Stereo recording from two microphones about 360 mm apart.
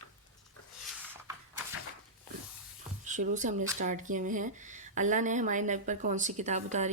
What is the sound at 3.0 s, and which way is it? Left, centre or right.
Speech, centre.